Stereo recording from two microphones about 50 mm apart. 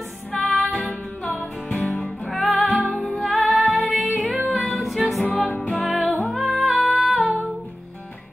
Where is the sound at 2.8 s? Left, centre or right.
Left.